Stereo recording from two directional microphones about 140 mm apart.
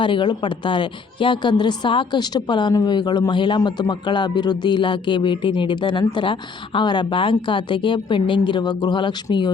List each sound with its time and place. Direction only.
0.0 s a woman's voice: 35° left (ahead or behind)